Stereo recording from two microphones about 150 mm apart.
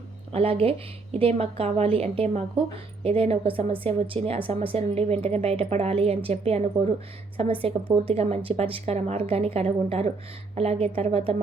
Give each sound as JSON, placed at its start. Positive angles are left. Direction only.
{"t": 0.3, "sound": "a woman's voice", "side_deg": -40}